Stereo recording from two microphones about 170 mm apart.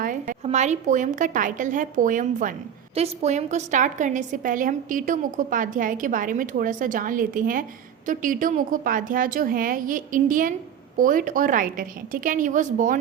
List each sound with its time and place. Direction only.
0.0 s a sound: 50° right (ahead or behind)
0.4 s a woman's voice: 40° right (ahead or behind)
2.9 s a woman's voice: 40° right (ahead or behind)